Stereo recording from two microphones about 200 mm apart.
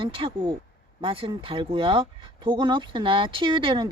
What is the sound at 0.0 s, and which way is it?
Speech, 25° right (ahead or behind).